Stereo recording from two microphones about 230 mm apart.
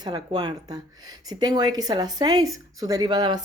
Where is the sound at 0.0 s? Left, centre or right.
Centre.